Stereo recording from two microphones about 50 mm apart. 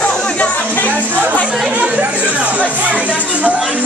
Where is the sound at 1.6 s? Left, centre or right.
Right.